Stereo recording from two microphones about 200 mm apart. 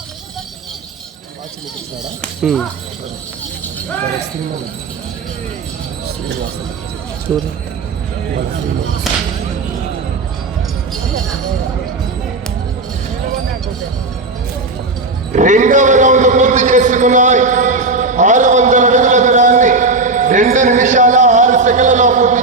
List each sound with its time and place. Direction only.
2.2 s speech: centre (ahead or behind)
9.1 s speech: centre (ahead or behind)
15.3 s a sound: 40° right (ahead or behind)